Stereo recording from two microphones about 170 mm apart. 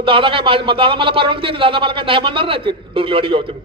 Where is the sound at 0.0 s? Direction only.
30° right (ahead or behind).